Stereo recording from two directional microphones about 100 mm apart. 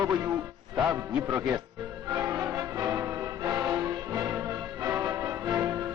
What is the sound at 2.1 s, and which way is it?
Music, 35° right (ahead or behind).